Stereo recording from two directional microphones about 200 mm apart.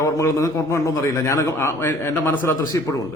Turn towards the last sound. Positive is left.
turn(degrees=15)  # may be behind; listen again after turning